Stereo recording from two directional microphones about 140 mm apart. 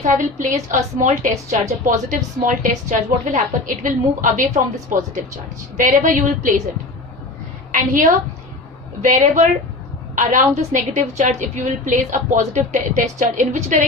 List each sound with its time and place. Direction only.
0.0 s a woman's voice: 65° right (ahead or behind)
9.0 s a woman's voice: 60° right (ahead or behind)